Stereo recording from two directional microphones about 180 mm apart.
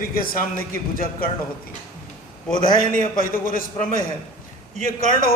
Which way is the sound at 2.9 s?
50° left (ahead or behind).